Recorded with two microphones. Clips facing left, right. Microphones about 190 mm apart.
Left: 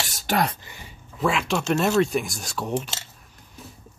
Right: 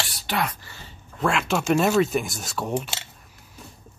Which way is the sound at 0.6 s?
15° left (ahead or behind).